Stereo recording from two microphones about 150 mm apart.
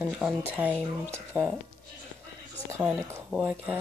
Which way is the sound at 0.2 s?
10° right (ahead or behind).